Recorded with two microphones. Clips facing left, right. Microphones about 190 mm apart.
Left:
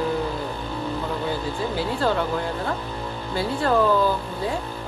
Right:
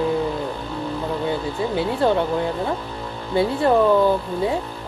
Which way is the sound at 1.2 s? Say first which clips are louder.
Right 3 dB; 20° right (ahead or behind).